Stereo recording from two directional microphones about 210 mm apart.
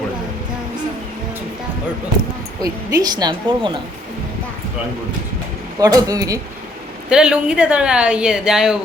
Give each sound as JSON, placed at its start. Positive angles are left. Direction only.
{"t": 2.6, "sound": "speech", "side_deg": -20}
{"t": 5.8, "sound": "speech", "side_deg": -15}
{"t": 7.1, "sound": "speech", "side_deg": -5}